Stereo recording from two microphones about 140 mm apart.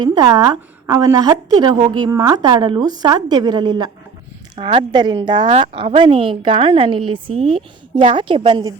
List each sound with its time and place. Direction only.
0.0 s a woman's voice: 30° right (ahead or behind)
5.5 s a woman's voice: 50° right (ahead or behind); by 8.7 s 35° right (ahead or behind)